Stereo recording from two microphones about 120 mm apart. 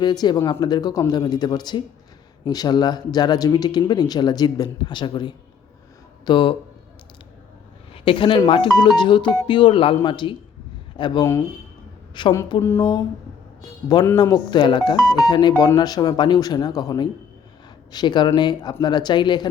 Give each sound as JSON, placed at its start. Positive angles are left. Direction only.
{"t": 0.0, "sound": "speech", "side_deg": 35}
{"t": 7.9, "sound": "speech", "side_deg": 45}
{"t": 12.5, "sound": "a sound", "side_deg": 25}
{"t": 13.6, "sound": "a man's voice", "side_deg": 35}